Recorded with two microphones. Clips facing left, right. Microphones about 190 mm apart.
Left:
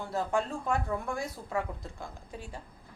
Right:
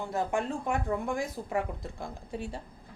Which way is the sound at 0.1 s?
15° right (ahead or behind).